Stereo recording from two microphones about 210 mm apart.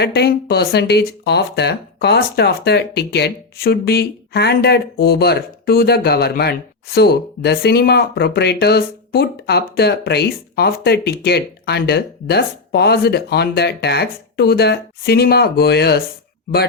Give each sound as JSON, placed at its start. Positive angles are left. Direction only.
{"t": 0.0, "sound": "speech", "side_deg": 50}